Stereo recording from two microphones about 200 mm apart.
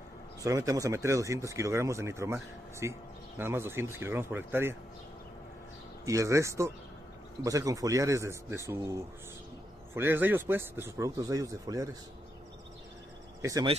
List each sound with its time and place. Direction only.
0.4 s speech: 15° right (ahead or behind)
6.0 s speech: 15° right (ahead or behind)
13.4 s speech: 15° right (ahead or behind)